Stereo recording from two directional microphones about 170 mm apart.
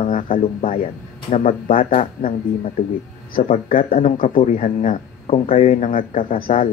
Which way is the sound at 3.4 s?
45° left (ahead or behind).